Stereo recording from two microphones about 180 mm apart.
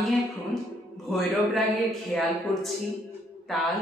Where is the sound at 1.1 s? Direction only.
Centre (ahead or behind).